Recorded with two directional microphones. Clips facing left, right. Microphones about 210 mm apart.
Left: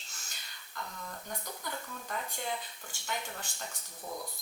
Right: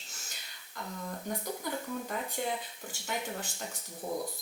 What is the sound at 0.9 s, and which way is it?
Speech, 20° right (ahead or behind).